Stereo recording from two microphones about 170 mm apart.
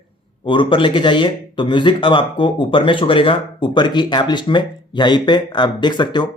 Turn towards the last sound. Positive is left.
turn(degrees=25)  # may be behind; listen again after turning